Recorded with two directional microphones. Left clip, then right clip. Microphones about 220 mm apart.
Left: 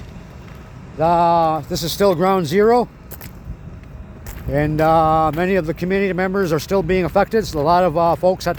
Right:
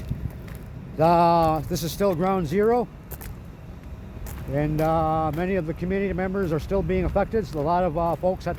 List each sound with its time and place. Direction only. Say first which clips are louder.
0.9 s a sound: left 4 dB; 5° right (ahead or behind)
1.7 s speech: left 7 dB; 35° left (ahead or behind)
4.5 s speech: left 8 dB; 50° left (ahead or behind)